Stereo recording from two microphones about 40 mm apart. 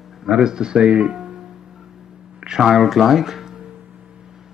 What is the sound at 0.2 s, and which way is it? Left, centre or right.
Speech, centre.